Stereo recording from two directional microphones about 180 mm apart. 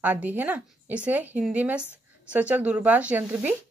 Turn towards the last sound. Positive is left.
turn(degrees=-10)  # may be behind; listen again after turning